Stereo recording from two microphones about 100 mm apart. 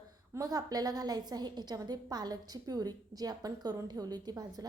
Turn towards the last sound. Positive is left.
turn(degrees=-40)  # may be behind; listen again after turning